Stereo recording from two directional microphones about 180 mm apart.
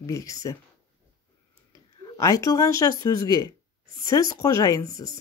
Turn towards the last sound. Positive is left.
turn(degrees=20)  # may be behind; listen again after turning